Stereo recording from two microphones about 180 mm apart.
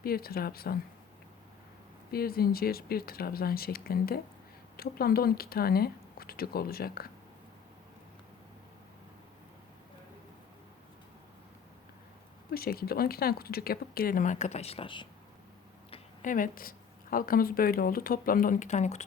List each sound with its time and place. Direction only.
0.0 s speech: 55° left (ahead or behind)
2.1 s speech: 55° left (ahead or behind)
12.5 s speech: 55° left (ahead or behind); by 15.0 s 30° left (ahead or behind)
16.2 s speech: 50° left (ahead or behind)